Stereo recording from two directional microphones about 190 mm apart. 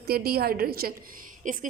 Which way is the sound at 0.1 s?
55° right (ahead or behind).